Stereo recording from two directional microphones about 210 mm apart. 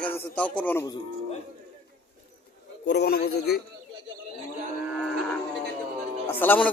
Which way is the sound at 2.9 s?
50° left (ahead or behind).